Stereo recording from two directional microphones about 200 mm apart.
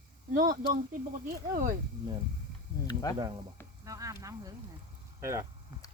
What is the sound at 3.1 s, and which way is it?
Speech, 25° right (ahead or behind).